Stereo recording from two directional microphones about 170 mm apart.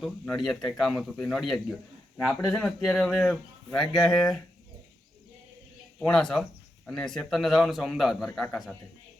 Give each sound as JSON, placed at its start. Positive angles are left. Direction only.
{"t": 0.0, "sound": "a man's voice", "side_deg": 0}
{"t": 6.0, "sound": "a man's voice", "side_deg": 5}